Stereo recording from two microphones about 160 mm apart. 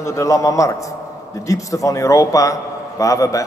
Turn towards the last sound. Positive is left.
turn(degrees=20)  # may be behind; listen again after turning